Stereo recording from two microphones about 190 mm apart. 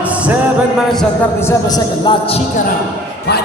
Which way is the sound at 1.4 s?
15° left (ahead or behind).